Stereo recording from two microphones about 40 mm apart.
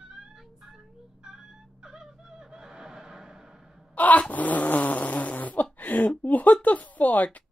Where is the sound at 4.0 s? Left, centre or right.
Left.